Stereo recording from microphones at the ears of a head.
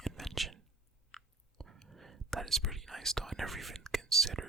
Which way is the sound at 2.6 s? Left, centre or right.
Centre.